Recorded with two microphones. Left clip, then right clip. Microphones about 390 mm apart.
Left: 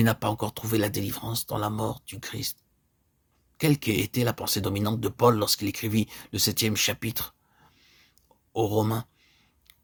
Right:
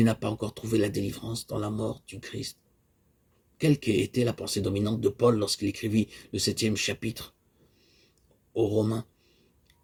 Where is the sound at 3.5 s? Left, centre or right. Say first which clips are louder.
Even; left.